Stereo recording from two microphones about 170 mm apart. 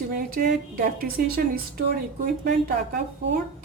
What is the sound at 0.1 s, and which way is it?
Speech, 60° right (ahead or behind).